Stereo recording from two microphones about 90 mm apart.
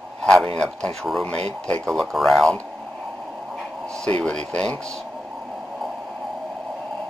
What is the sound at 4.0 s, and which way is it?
Speech, 10° left (ahead or behind).